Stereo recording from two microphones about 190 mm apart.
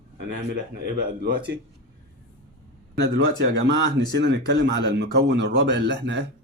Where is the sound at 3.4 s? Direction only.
65° right (ahead or behind).